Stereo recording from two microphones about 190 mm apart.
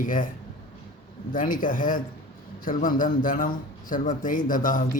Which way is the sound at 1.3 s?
45° left (ahead or behind).